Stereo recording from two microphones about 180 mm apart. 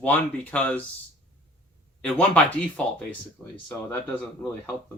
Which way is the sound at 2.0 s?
10° left (ahead or behind).